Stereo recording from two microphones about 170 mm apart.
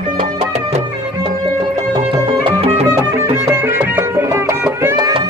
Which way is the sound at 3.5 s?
15° right (ahead or behind).